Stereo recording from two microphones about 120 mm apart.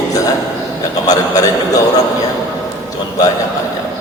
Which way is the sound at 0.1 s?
30° left (ahead or behind).